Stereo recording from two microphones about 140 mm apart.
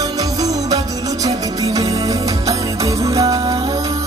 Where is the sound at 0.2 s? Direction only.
25° right (ahead or behind).